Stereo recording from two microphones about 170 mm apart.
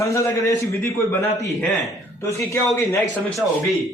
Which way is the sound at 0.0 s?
20° left (ahead or behind).